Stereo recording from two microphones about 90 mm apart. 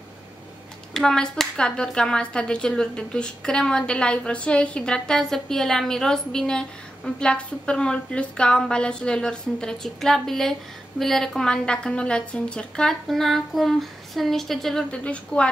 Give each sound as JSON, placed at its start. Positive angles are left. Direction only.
{"t": 0.9, "sound": "a woman's voice", "side_deg": 5}